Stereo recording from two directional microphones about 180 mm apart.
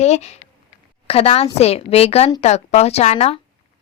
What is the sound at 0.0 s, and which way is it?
A woman's voice, 40° left (ahead or behind).